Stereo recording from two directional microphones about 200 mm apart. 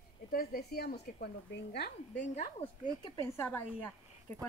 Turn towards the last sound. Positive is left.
turn(degrees=10)  # may be behind; listen again after turning